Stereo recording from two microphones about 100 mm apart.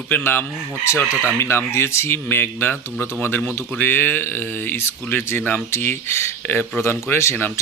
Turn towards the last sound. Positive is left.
turn(degrees=25)  # may be behind; listen again after turning